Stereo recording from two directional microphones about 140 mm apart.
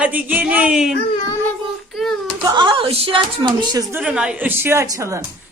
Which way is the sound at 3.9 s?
10° right (ahead or behind).